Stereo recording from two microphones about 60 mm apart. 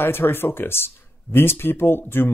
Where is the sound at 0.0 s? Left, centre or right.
Left.